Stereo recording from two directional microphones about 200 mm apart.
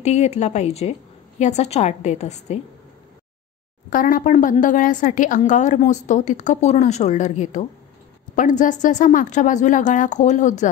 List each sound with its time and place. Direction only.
0.0 s a woman's voice: 35° left (ahead or behind)
3.9 s a woman's voice: 45° left (ahead or behind)